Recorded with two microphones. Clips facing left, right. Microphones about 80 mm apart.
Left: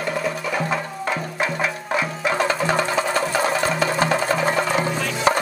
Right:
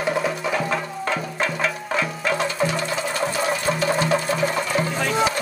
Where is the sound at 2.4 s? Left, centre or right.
Left.